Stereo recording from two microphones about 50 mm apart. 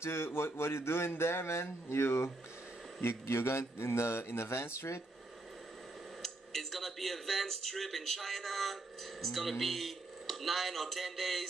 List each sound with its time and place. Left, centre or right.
0.0 s speech: left
6.2 s speech: centre